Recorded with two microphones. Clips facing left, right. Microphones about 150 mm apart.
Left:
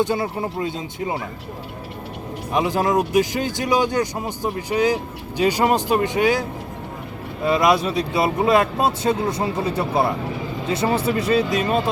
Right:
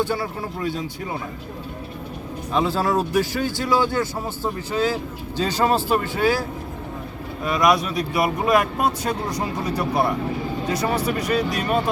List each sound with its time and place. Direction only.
0.0 s speech: 20° left (ahead or behind)
2.5 s speech: 15° left (ahead or behind)
7.4 s speech: 25° left (ahead or behind)